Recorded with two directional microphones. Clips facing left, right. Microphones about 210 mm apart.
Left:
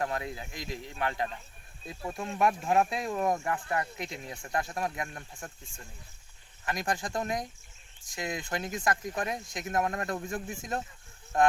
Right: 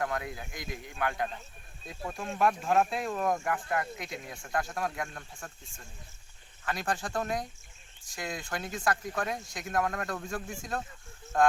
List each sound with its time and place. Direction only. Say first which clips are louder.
0.0 s speech: even; 25° left (ahead or behind)
6.7 s speech: left 1 dB; 15° left (ahead or behind)